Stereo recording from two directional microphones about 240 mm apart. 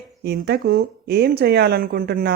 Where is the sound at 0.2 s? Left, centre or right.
Right.